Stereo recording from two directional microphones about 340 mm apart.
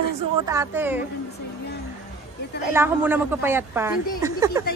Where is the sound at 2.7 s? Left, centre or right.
Centre.